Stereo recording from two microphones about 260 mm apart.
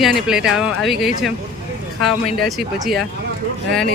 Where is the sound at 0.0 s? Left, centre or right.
Centre.